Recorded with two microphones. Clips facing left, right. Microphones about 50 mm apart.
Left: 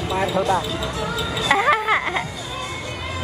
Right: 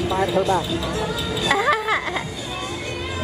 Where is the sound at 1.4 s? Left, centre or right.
Left.